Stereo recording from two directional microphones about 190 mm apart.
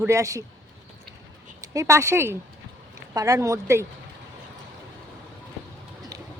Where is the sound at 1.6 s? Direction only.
15° right (ahead or behind).